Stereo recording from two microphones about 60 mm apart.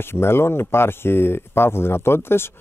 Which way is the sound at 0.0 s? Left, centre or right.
Left.